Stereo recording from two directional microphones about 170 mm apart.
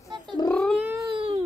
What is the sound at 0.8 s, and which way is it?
Cat, 10° right (ahead or behind).